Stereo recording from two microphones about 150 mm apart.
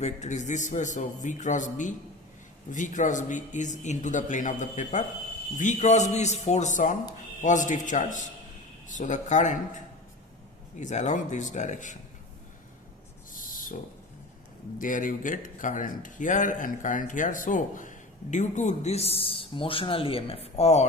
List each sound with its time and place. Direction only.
0.0 s a man's voice: 50° left (ahead or behind)
10.8 s a man's voice: 55° left (ahead or behind)
13.3 s owl: 65° left (ahead or behind)
14.8 s speech: 60° left (ahead or behind); by 20.8 s 45° left (ahead or behind)